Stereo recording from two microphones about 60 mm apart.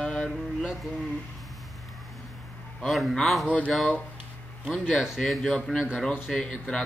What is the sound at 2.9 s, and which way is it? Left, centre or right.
Speech, centre.